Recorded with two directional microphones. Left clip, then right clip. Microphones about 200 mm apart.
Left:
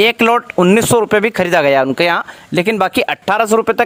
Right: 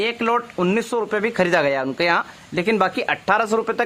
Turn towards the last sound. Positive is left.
turn(degrees=40)  # may be behind; listen again after turning